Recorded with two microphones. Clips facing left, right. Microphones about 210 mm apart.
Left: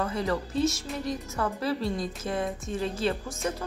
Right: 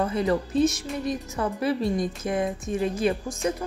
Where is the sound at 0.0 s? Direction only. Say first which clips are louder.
Right 5 dB; 20° right (ahead or behind).